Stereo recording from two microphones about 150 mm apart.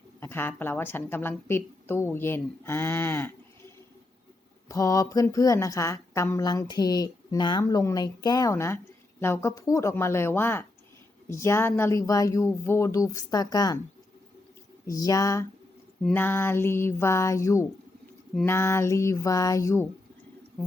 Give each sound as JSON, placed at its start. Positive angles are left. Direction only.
{"t": 0.2, "sound": "a woman's voice", "side_deg": 15}
{"t": 4.7, "sound": "a woman's voice", "side_deg": 20}
{"t": 14.8, "sound": "a woman's voice", "side_deg": 20}